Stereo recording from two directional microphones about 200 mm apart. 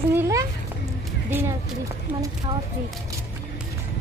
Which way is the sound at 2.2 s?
15° right (ahead or behind).